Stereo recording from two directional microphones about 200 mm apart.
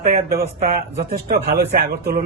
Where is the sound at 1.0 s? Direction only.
50° right (ahead or behind).